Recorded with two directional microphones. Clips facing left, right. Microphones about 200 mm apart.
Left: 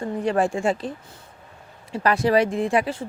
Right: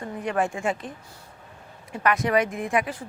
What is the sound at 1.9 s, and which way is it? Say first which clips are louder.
Speech: left 3 dB; 30° left (ahead or behind).